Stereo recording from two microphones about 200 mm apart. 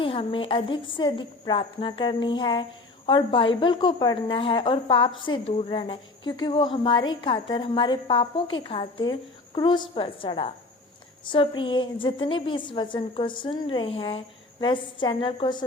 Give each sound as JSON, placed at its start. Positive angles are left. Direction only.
{"t": 0.0, "sound": "a woman's voice", "side_deg": 25}